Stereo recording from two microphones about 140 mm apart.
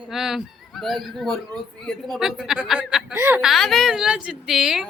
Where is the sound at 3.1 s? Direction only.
20° right (ahead or behind).